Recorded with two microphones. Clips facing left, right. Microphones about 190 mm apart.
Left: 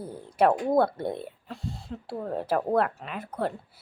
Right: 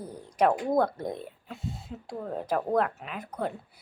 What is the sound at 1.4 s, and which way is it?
Speech, centre (ahead or behind).